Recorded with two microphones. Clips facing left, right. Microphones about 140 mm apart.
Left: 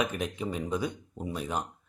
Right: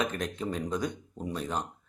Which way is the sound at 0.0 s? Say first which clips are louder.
Left 1 dB; 10° left (ahead or behind).